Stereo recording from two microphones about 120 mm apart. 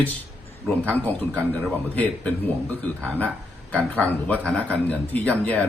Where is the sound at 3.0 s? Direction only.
15° left (ahead or behind).